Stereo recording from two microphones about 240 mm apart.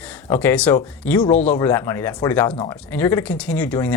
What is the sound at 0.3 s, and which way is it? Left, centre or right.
Speech, centre.